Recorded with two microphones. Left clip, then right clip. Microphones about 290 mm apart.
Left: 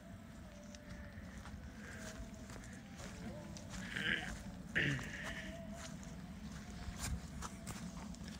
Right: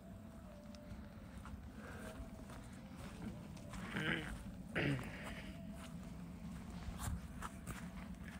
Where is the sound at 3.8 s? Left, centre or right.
Centre.